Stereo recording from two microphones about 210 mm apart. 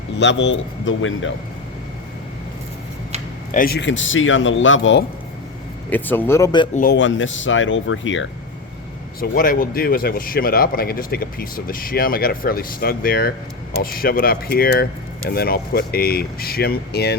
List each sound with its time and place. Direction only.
0.2 s speech: 60° left (ahead or behind)
3.5 s speech: 45° left (ahead or behind); by 5.0 s 60° left (ahead or behind)
5.9 s speech: 10° left (ahead or behind)
6.9 s speech: 65° left (ahead or behind)
9.2 s speech: 40° left (ahead or behind)